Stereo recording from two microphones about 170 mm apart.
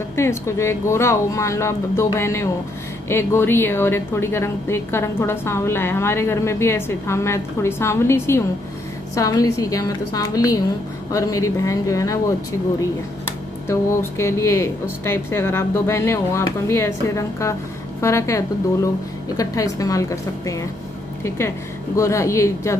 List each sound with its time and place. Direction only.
0.1 s a woman's voice: 15° left (ahead or behind)
13.7 s a woman's voice: 15° left (ahead or behind)
21.9 s a woman's voice: 15° left (ahead or behind)